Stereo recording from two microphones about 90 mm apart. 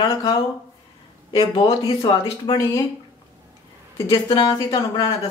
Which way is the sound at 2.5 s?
55° left (ahead or behind).